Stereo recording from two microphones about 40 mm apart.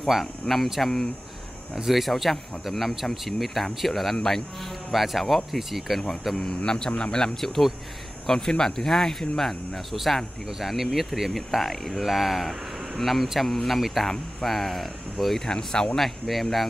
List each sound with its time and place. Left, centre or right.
0.0 s speech: centre
6.3 s speech: centre
9.9 s speech: centre
15.4 s speech: centre
16.0 s speech: centre